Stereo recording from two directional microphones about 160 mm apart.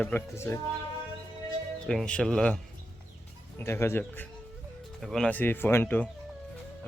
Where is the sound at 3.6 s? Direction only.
15° left (ahead or behind).